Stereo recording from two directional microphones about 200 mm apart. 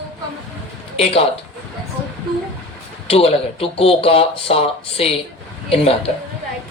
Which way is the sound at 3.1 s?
30° left (ahead or behind).